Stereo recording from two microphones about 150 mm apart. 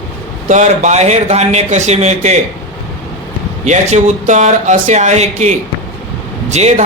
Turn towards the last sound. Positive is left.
turn(degrees=-50)  # may be behind; listen again after turning